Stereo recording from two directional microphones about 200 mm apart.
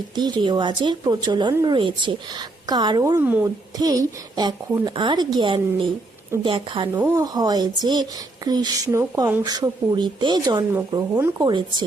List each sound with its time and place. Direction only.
0.2 s a woman's voice: 20° right (ahead or behind)
6.9 s speech: 10° right (ahead or behind)
7.3 s a woman's voice: 20° right (ahead or behind)
11.3 s a woman's voice: 20° right (ahead or behind)